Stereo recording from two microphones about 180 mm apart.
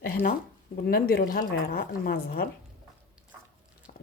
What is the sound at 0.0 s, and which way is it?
A woman's voice, 55° left (ahead or behind).